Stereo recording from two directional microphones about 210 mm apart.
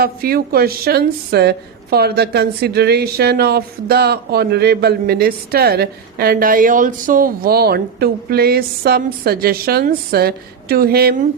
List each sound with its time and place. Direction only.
0.0 s a woman's voice: 45° right (ahead or behind)